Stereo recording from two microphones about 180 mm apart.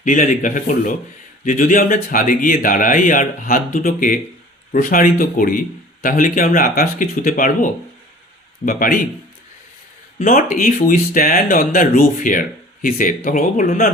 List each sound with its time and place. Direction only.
0.0 s speech: 45° left (ahead or behind)
10.2 s speech: 45° left (ahead or behind)